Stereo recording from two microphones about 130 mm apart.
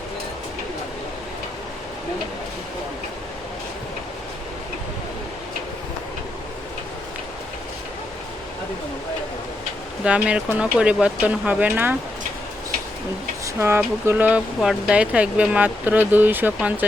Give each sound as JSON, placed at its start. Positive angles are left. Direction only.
{"t": 10.0, "sound": "speech", "side_deg": -10}
{"t": 13.4, "sound": "speech", "side_deg": -20}